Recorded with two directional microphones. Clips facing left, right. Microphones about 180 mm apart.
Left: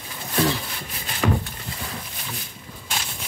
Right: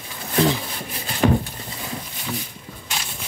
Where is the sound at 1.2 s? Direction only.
40° right (ahead or behind).